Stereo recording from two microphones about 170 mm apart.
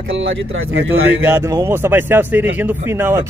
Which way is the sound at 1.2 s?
15° right (ahead or behind).